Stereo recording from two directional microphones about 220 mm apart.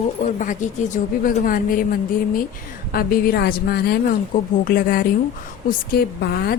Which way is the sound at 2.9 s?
40° left (ahead or behind).